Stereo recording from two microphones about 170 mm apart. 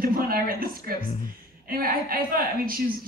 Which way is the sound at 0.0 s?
60° right (ahead or behind).